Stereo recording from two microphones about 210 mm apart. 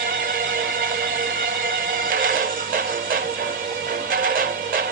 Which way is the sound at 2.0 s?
40° right (ahead or behind).